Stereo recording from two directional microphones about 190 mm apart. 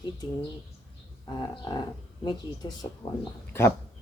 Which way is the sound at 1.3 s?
20° left (ahead or behind).